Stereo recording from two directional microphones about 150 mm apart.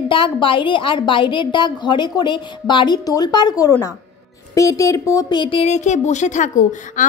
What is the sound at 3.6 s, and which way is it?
A woman's voice, 15° left (ahead or behind).